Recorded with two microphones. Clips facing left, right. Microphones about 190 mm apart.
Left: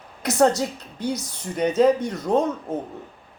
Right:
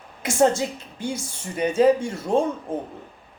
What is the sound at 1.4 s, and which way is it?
Speech, 10° right (ahead or behind).